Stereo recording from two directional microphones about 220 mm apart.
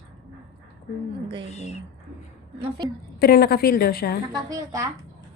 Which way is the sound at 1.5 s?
30° left (ahead or behind).